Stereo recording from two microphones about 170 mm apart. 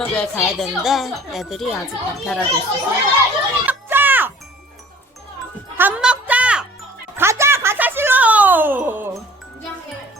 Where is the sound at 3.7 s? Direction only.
10° right (ahead or behind).